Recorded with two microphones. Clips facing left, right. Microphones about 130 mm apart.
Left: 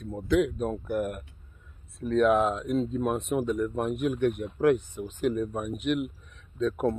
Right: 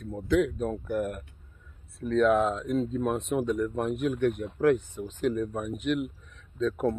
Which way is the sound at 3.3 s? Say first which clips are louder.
Even; 5° left (ahead or behind).